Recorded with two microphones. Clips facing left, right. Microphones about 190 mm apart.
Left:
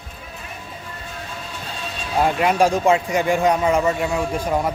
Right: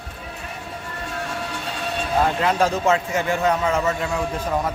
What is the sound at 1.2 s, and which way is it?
Music, 75° right (ahead or behind).